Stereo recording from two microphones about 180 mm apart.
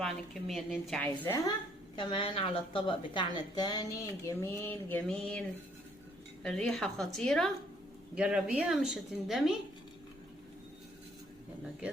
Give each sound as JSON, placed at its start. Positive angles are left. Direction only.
{"t": 0.0, "sound": "a woman's voice", "side_deg": 0}
{"t": 2.0, "sound": "a woman's voice", "side_deg": 30}